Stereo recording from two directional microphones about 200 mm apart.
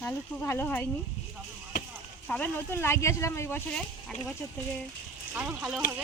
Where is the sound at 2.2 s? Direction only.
5° left (ahead or behind).